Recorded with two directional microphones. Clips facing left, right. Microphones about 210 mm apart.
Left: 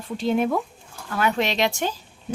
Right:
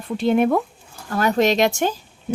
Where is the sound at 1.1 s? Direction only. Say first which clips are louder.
Right 5 dB; 40° right (ahead or behind).